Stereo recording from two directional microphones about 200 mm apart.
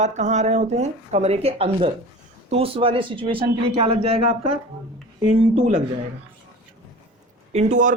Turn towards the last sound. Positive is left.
turn(degrees=-35)  # may be behind; listen again after turning